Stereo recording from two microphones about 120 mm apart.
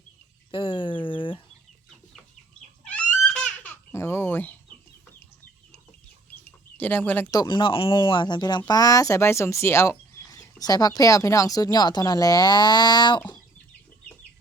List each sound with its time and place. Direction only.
0.5 s a sound: 45° left (ahead or behind)
2.8 s babbling: 10° left (ahead or behind)
6.7 s speech: 15° left (ahead or behind)
7.3 s speech: 30° left (ahead or behind)